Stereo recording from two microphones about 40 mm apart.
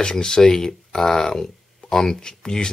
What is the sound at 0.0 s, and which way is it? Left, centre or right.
Speech, centre.